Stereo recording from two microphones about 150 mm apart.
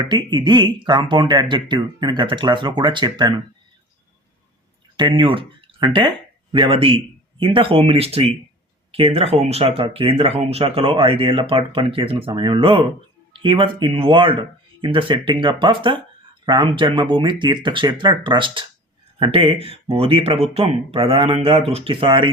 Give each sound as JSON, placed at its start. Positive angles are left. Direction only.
{"t": 0.0, "sound": "speech", "side_deg": -25}
{"t": 4.9, "sound": "speech", "side_deg": -30}